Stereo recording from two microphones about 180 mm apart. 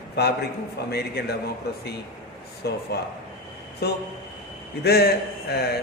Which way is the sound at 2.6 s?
65° left (ahead or behind).